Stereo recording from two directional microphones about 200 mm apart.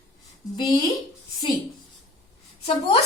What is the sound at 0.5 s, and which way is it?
Speech, 20° left (ahead or behind).